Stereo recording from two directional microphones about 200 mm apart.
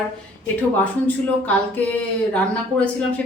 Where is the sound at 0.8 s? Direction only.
5° left (ahead or behind).